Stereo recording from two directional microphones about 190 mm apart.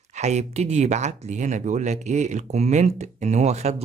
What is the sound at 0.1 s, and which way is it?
Speech, 35° right (ahead or behind).